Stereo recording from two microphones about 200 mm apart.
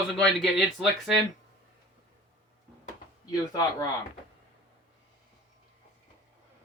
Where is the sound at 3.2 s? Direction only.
20° left (ahead or behind).